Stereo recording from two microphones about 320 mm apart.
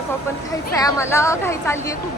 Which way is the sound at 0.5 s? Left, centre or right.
Centre.